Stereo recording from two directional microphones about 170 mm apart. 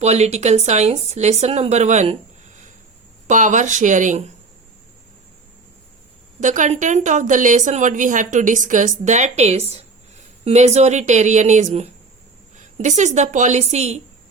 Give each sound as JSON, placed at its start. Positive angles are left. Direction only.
{"t": 0.0, "sound": "speech", "side_deg": -40}
{"t": 3.2, "sound": "a woman's voice", "side_deg": -45}
{"t": 6.4, "sound": "a woman's voice", "side_deg": -45}